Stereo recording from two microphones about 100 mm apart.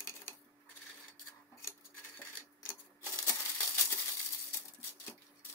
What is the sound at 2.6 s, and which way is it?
Typewriter, 25° left (ahead or behind).